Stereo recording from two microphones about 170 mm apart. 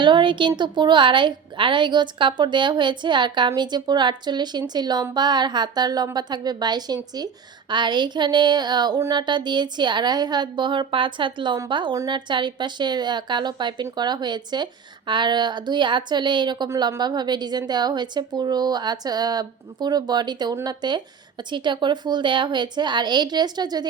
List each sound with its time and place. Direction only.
0.0 s a woman's voice: 30° right (ahead or behind)